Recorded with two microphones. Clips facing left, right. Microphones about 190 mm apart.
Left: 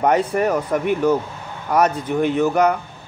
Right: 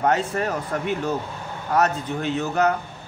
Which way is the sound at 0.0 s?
15° left (ahead or behind).